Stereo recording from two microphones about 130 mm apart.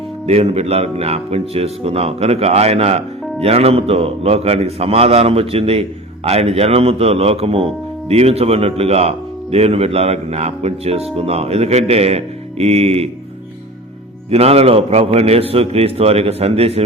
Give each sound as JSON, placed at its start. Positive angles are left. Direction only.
{"t": 0.3, "sound": "speech", "side_deg": -55}
{"t": 14.3, "sound": "speech", "side_deg": -50}